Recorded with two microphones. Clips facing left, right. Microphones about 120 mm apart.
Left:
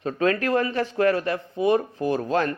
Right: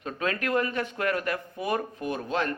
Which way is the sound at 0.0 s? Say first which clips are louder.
Left 7 dB; 35° left (ahead or behind).